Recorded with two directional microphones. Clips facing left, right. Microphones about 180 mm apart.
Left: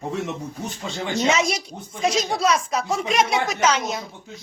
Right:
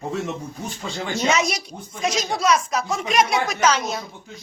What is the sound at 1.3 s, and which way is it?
Speech, 25° left (ahead or behind).